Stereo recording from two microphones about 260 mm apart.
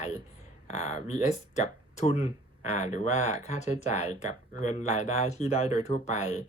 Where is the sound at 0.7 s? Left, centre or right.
Left.